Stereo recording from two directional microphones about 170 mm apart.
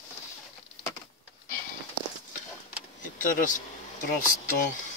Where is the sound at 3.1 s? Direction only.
50° left (ahead or behind).